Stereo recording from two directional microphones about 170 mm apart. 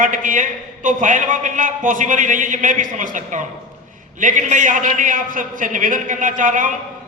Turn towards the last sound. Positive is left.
turn(degrees=-50)  # may be behind; listen again after turning